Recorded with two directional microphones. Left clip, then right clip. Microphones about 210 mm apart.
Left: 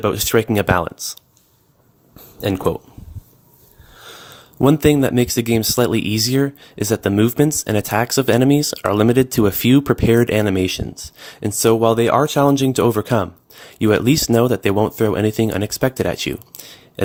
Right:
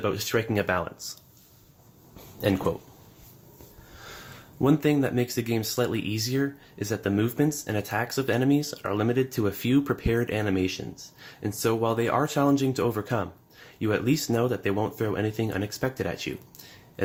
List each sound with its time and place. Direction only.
0.0 s speech: 60° left (ahead or behind)
2.1 s a sound: 35° left (ahead or behind)
3.9 s sniff: 45° left (ahead or behind)
4.6 s speech: 50° left (ahead or behind)